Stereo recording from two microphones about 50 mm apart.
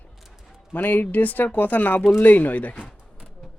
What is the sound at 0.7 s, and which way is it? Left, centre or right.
Speech, left.